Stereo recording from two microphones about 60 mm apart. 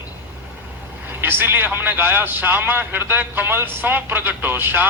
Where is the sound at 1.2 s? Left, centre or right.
Right.